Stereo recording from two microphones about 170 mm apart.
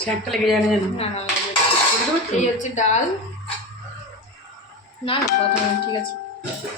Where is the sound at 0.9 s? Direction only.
35° left (ahead or behind).